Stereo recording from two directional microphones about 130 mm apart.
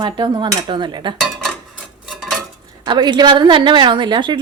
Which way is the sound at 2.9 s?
35° right (ahead or behind).